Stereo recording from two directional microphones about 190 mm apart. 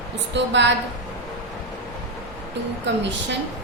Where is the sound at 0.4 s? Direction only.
70° right (ahead or behind).